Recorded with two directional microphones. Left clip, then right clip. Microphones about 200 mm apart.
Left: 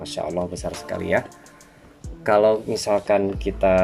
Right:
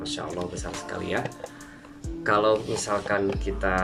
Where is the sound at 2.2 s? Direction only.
40° left (ahead or behind).